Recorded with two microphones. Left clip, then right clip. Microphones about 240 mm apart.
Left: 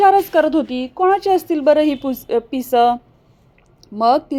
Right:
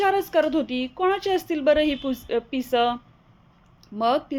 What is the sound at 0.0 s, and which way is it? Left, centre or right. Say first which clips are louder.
A woman's voice: left 9 dB; centre.